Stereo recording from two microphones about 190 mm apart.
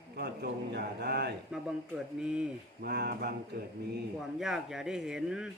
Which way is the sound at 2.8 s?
55° right (ahead or behind).